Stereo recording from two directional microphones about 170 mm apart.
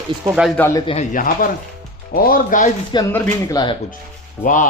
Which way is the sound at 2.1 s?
55° left (ahead or behind).